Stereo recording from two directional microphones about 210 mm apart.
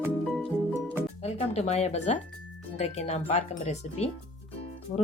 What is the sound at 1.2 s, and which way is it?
Speech, 30° left (ahead or behind).